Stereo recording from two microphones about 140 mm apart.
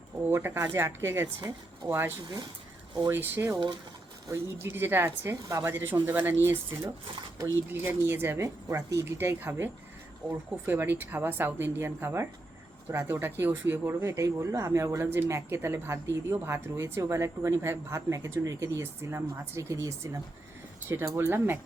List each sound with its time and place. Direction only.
0.3 s speech: 15° right (ahead or behind)
10.7 s speech: 15° right (ahead or behind)